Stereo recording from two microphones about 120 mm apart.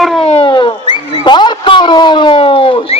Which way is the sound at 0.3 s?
50° left (ahead or behind).